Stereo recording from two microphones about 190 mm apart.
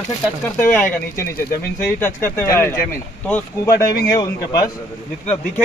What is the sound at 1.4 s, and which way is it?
Speech, 55° left (ahead or behind).